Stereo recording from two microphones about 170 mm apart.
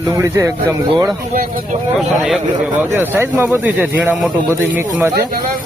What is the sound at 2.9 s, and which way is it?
A man's voice, 15° right (ahead or behind).